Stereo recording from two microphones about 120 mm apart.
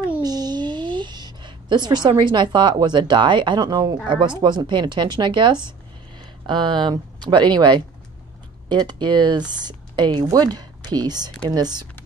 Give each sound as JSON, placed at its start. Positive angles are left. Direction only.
{"t": 0.2, "sound": "speech", "side_deg": -35}